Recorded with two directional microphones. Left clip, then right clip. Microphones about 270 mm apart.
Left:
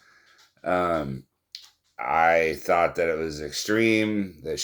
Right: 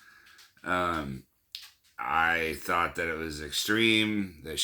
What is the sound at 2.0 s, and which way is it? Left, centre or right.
Speech, right.